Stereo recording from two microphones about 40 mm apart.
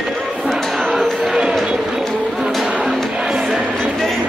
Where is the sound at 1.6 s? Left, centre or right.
Centre.